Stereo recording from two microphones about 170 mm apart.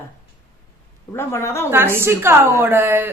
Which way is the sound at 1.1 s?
15° left (ahead or behind).